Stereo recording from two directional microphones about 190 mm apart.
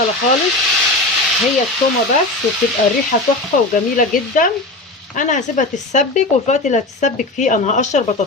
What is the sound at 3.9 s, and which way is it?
A woman's voice, 45° left (ahead or behind).